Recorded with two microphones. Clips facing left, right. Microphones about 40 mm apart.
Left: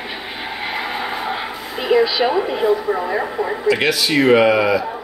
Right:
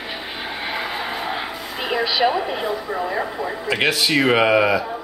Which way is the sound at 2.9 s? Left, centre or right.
Centre.